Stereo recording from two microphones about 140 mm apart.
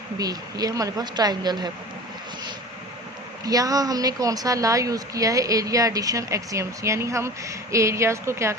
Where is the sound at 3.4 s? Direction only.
25° right (ahead or behind).